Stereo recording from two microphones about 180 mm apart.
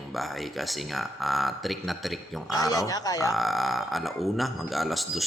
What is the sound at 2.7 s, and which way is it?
Speech, 20° left (ahead or behind).